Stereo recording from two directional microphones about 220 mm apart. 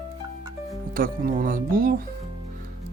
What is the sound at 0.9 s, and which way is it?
Speech, 40° right (ahead or behind).